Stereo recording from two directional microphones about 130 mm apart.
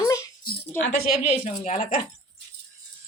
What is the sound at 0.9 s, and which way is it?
A woman's voice, 60° left (ahead or behind).